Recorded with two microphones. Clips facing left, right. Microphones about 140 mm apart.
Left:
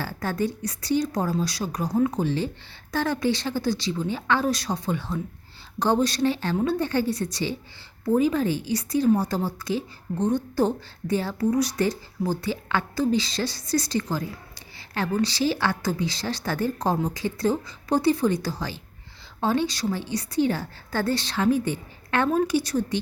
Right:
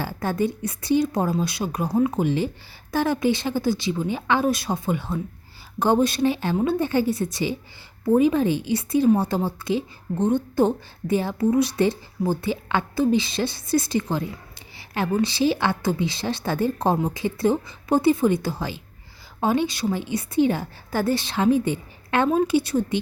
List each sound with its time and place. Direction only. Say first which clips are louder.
0.0 s a woman's voice: right 3 dB; 15° right (ahead or behind)
1.9 s a woman's voice: right 1 dB; 5° right (ahead or behind)
2.1 s a woman's voice: right 3 dB; 15° right (ahead or behind)